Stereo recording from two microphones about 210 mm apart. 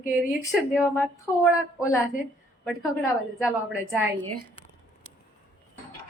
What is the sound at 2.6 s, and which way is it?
Speech, centre (ahead or behind).